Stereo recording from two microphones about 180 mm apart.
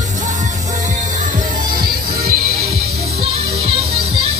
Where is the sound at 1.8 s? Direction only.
60° right (ahead or behind).